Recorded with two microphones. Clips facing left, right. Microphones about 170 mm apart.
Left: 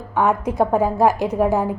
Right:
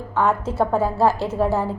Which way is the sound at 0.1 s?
15° left (ahead or behind).